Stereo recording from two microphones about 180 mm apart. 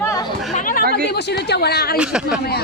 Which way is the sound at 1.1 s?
65° left (ahead or behind).